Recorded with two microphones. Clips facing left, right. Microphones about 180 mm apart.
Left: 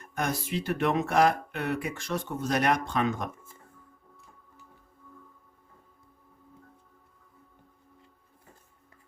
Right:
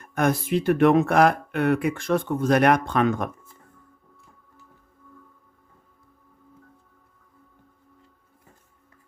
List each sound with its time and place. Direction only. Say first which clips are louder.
0.0 s speech: right 8 dB; 55° right (ahead or behind)